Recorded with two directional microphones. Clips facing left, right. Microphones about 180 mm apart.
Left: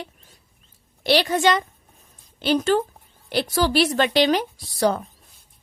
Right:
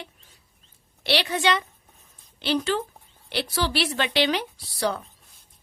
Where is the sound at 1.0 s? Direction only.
45° left (ahead or behind).